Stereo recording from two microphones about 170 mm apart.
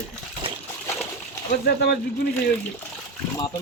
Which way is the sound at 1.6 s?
75° left (ahead or behind).